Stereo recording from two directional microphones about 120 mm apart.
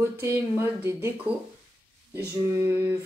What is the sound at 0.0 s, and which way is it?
Speech, 20° right (ahead or behind).